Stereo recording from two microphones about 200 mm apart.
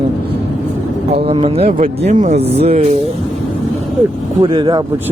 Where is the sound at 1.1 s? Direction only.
30° right (ahead or behind).